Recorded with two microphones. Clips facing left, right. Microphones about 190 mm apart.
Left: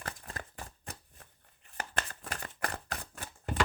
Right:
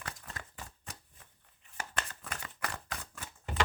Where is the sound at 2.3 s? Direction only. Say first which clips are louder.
Left 3 dB; 40° left (ahead or behind).